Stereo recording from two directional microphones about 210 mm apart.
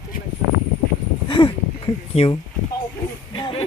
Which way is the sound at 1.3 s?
20° left (ahead or behind).